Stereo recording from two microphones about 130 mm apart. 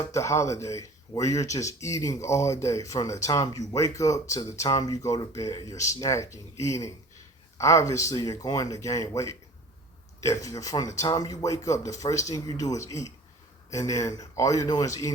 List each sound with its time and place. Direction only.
0.1 s speech: 25° left (ahead or behind)